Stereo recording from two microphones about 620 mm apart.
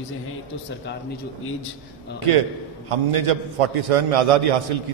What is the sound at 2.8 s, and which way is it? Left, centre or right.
A man's voice, right.